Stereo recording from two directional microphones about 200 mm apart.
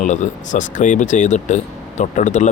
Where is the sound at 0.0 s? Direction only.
35° left (ahead or behind).